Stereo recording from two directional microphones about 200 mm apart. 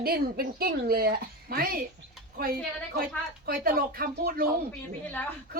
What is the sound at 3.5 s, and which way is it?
Speech, 45° right (ahead or behind).